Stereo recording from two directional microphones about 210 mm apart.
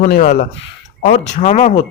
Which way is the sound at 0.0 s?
35° left (ahead or behind).